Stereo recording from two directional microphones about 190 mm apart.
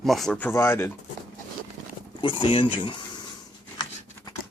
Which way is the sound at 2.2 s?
30° left (ahead or behind).